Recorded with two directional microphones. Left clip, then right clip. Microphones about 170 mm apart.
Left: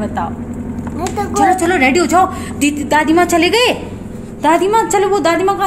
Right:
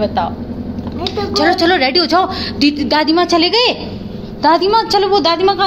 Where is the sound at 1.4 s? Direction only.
15° right (ahead or behind).